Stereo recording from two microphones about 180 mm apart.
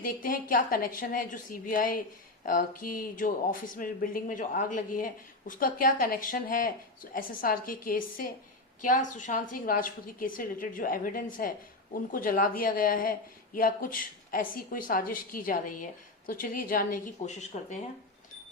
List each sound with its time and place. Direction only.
0.0 s speech: 50° left (ahead or behind)